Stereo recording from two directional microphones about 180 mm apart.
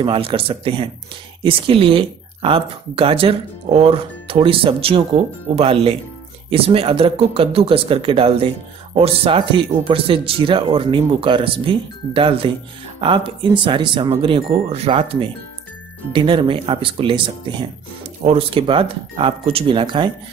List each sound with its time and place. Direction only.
0.0 s speech: 30° right (ahead or behind)